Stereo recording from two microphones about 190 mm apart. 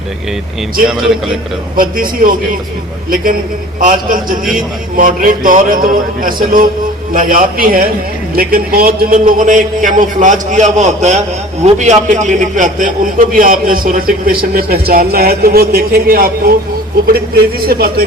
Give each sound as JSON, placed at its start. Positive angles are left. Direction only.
{"t": 0.9, "sound": "a man's voice", "side_deg": 0}
{"t": 1.7, "sound": "a man's voice", "side_deg": -50}
{"t": 3.8, "sound": "a man's voice", "side_deg": -45}